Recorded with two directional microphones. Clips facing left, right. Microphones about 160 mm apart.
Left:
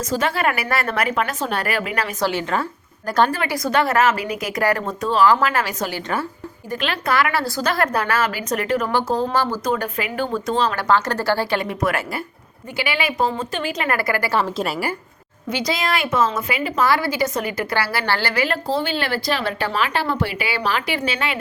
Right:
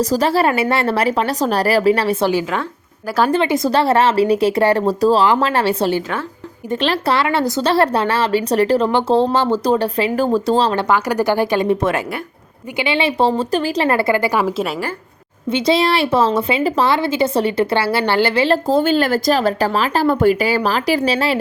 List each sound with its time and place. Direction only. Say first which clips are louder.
0.0 s speech: right 6 dB; 35° right (ahead or behind)
3.3 s a woman's voice: right 5 dB; 25° right (ahead or behind)
10.8 s a woman's voice: right 3 dB; 10° right (ahead or behind)
14.3 s a woman's voice: right 3 dB; 5° right (ahead or behind)
15.4 s a woman's voice: right 7 dB; 25° right (ahead or behind)
18.7 s speech: right 7 dB; 45° right (ahead or behind)